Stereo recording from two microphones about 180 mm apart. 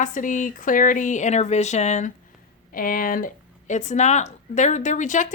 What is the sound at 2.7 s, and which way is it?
Speech, 50° left (ahead or behind).